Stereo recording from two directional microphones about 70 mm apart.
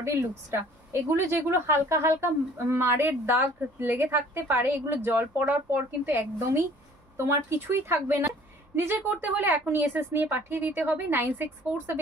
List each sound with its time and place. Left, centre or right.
0.0 s a woman's voice: right